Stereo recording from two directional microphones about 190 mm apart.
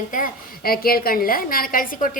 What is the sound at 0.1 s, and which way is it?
A woman's voice, 50° left (ahead or behind).